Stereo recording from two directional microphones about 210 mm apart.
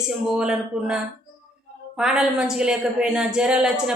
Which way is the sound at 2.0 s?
5° right (ahead or behind).